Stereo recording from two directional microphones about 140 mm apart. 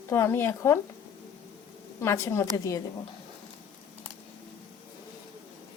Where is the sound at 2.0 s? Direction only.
20° left (ahead or behind).